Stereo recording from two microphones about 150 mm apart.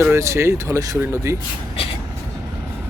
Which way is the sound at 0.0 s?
20° right (ahead or behind).